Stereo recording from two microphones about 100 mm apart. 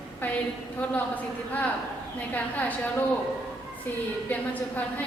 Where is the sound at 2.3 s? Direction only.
15° left (ahead or behind).